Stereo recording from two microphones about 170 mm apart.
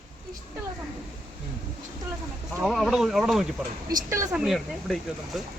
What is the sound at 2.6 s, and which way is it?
Speech, centre (ahead or behind).